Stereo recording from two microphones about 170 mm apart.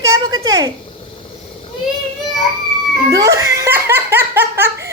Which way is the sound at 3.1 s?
20° right (ahead or behind).